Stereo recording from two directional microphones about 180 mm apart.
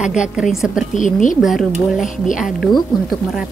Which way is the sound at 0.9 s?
45° left (ahead or behind).